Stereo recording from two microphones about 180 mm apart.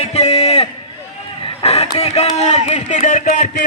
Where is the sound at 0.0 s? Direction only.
35° left (ahead or behind).